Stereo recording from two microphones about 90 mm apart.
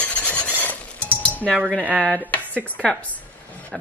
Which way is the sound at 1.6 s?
5° right (ahead or behind).